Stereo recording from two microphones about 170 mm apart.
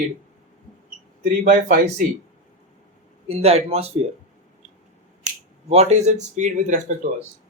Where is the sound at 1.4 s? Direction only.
50° right (ahead or behind).